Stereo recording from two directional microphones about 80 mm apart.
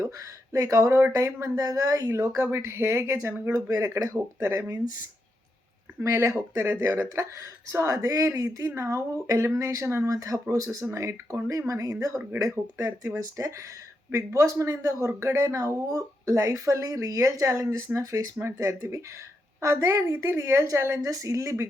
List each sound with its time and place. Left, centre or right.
0.5 s speech: right
6.0 s speech: right
19.6 s speech: right